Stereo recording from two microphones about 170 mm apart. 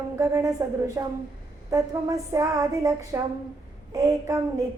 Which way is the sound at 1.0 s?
20° right (ahead or behind).